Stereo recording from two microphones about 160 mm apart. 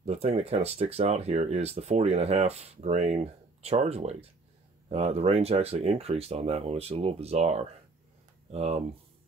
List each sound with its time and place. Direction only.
0.0 s speech: 40° right (ahead or behind)